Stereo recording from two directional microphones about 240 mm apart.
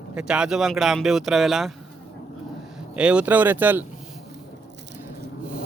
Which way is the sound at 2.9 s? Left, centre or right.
Centre.